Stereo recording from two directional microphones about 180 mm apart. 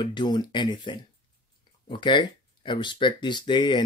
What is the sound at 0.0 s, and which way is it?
Speech, 25° left (ahead or behind).